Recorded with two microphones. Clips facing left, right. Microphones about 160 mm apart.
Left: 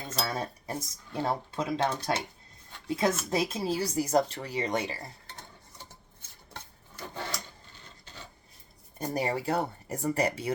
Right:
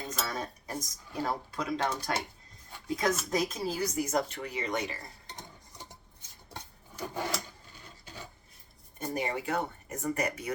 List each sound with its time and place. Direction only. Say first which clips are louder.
0.2 s a woman's voice: left 6 dB; 30° left (ahead or behind)
5.2 s sewing machine: right 1 dB; 15° right (ahead or behind)
6.5 s rub: right 1 dB; 10° right (ahead or behind)
7.8 s a sound: right 3 dB; 10° right (ahead or behind)
9.0 s a woman's voice: left 3 dB; 35° left (ahead or behind)